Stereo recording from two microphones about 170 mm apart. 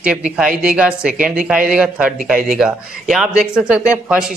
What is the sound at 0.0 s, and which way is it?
Speech, 5° right (ahead or behind).